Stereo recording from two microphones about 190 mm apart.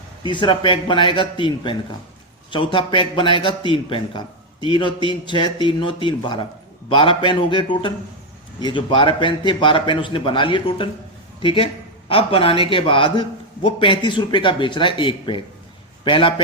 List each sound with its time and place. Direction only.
0.2 s a man's voice: 25° left (ahead or behind)